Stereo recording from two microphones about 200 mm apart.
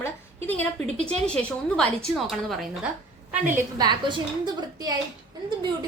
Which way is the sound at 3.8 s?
20° right (ahead or behind).